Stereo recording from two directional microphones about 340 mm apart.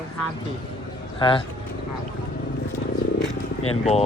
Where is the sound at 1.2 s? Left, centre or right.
Centre.